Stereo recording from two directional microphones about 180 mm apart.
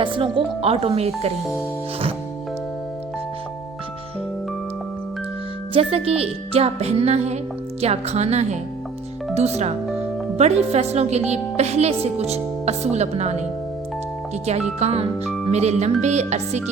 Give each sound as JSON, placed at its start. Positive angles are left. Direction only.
{"t": 0.0, "sound": "speech", "side_deg": -30}
{"t": 5.7, "sound": "speech", "side_deg": -35}
{"t": 14.8, "sound": "speech", "side_deg": -35}